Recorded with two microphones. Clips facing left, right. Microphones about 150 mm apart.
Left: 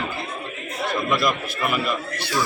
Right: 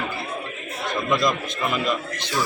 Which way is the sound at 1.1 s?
20° right (ahead or behind).